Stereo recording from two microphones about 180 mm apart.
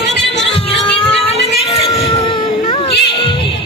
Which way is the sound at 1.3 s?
35° left (ahead or behind).